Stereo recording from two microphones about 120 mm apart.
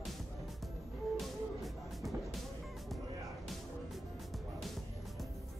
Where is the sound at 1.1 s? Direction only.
Centre (ahead or behind).